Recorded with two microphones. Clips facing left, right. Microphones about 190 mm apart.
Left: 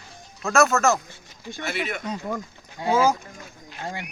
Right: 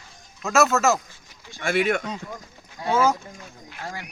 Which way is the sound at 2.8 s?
10° left (ahead or behind).